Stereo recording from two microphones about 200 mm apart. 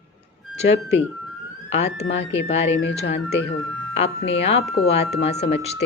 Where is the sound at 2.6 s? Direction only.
65° left (ahead or behind).